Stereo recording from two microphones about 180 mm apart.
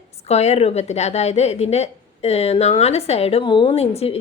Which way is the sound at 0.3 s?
35° left (ahead or behind).